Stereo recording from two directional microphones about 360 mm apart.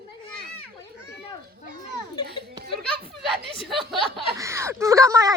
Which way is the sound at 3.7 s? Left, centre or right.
Centre.